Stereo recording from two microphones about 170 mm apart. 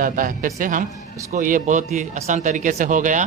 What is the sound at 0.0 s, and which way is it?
Speech, 55° right (ahead or behind).